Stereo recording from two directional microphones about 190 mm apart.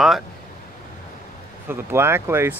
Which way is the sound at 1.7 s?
10° right (ahead or behind).